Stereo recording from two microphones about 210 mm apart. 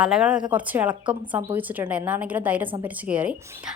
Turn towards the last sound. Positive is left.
turn(degrees=-5)  # may be behind; listen again after turning